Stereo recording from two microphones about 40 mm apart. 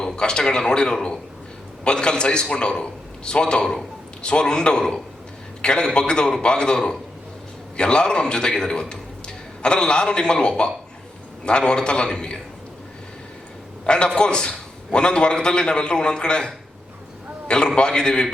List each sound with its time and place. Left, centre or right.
0.0 s a man's voice: centre
13.8 s a man's voice: left
17.7 s a man's voice: left